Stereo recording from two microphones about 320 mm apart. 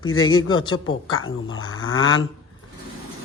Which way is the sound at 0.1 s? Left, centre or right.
Left.